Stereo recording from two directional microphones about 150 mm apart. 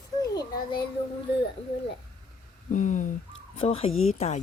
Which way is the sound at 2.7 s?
60° left (ahead or behind).